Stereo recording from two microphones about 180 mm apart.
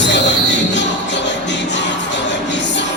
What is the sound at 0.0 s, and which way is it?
Music, 75° left (ahead or behind).